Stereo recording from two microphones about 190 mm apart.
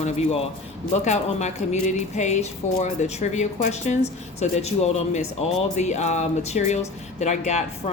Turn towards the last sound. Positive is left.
turn(degrees=35)  # may be behind; listen again after turning